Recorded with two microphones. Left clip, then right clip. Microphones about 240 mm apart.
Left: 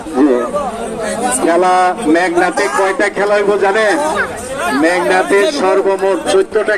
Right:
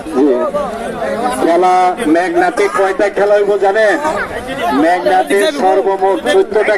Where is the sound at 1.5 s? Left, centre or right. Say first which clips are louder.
Right 1 dB; left.